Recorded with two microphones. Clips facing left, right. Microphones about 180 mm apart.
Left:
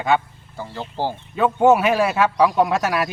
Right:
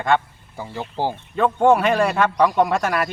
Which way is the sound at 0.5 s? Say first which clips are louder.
Right 1 dB; 15° right (ahead or behind).